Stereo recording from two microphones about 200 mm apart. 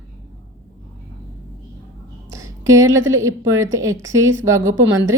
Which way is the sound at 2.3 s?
15° right (ahead or behind).